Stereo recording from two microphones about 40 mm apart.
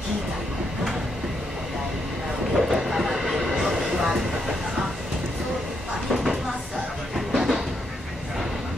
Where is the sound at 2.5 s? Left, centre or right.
Centre.